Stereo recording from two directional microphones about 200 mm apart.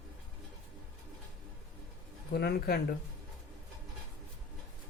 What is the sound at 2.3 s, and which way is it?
Speech, 50° left (ahead or behind).